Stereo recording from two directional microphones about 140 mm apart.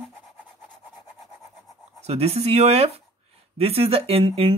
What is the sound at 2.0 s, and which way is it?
Speech, 50° right (ahead or behind).